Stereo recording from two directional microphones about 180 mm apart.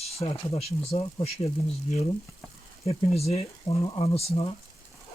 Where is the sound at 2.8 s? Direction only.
35° left (ahead or behind).